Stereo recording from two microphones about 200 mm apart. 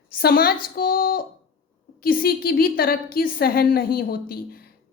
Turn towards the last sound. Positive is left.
turn(degrees=50)  # may be behind; listen again after turning